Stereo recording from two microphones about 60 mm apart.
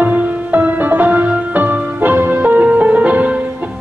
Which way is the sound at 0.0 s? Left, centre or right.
Right.